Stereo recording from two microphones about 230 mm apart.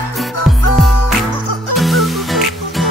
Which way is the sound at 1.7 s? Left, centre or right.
Centre.